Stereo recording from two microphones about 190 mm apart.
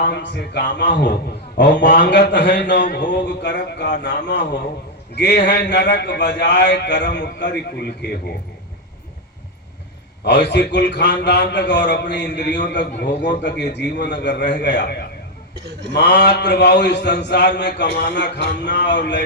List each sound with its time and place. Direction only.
0.1 s mantra: 60° left (ahead or behind)
10.2 s mantra: 65° left (ahead or behind)